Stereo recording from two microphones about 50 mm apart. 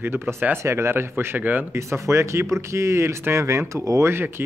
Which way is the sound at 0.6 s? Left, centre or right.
Right.